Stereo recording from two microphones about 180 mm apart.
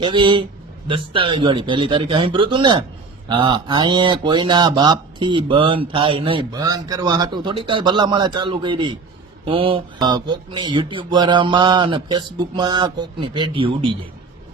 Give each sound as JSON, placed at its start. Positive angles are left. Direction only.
{"t": 0.0, "sound": "speech", "side_deg": -25}